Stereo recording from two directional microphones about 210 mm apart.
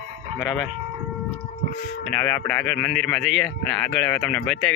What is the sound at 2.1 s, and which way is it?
Speech, 5° left (ahead or behind).